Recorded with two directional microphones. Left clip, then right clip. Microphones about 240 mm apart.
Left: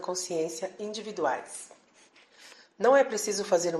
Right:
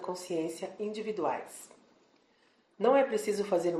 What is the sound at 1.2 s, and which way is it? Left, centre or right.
Speech, left.